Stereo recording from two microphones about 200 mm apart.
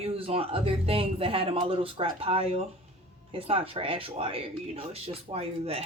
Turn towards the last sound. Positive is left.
turn(degrees=-30)  # may be behind; listen again after turning